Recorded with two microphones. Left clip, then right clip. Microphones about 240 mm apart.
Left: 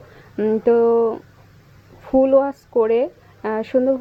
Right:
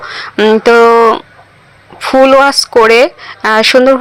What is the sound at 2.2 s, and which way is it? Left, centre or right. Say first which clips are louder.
Speech: right 12 dB; right.